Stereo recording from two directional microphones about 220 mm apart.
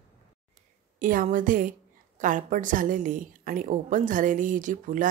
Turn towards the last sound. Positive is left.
turn(degrees=-35)  # may be behind; listen again after turning